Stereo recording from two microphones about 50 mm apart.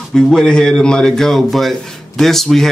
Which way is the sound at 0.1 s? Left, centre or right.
Centre.